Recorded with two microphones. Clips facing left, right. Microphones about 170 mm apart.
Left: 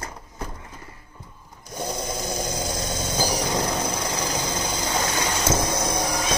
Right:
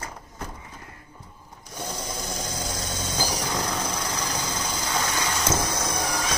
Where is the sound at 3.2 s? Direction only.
35° left (ahead or behind).